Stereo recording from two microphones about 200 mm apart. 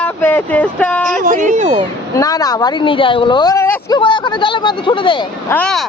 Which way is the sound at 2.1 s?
20° left (ahead or behind).